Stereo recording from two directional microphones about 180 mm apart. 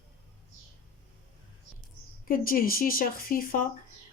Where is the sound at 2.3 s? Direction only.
50° left (ahead or behind).